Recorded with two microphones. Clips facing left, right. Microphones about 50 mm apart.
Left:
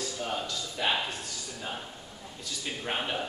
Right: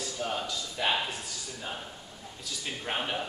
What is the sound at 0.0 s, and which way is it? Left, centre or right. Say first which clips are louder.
A man's voice: even; centre.